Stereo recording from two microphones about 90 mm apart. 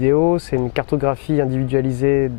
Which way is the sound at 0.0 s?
20° left (ahead or behind).